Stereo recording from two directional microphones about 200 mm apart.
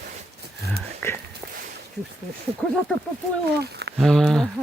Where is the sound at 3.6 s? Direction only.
55° right (ahead or behind).